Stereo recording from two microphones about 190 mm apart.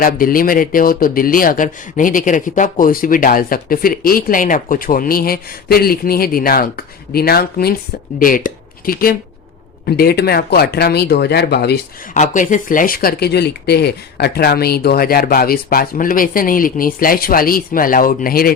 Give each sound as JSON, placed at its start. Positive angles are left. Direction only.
{"t": 0.0, "sound": "speech", "side_deg": 50}
{"t": 12.1, "sound": "speech", "side_deg": 40}